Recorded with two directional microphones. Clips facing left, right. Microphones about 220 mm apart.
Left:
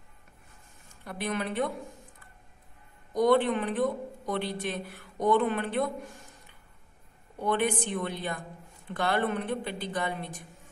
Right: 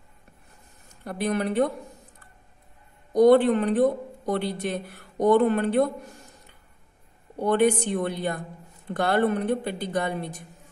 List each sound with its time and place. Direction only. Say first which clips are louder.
1.0 s speech: right 6 dB; 40° right (ahead or behind)
3.3 s speech: right 6 dB; 45° right (ahead or behind)
7.3 s speech: right 7 dB; 45° right (ahead or behind)